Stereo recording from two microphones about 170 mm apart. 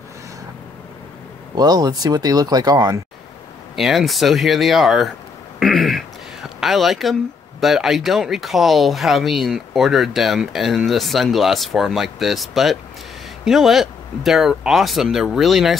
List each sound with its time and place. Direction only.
1.5 s speech: 25° right (ahead or behind)
3.7 s speech: centre (ahead or behind)
5.6 s a sound: centre (ahead or behind)
7.6 s speech: centre (ahead or behind)